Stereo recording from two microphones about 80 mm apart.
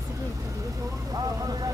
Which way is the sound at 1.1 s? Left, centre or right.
Right.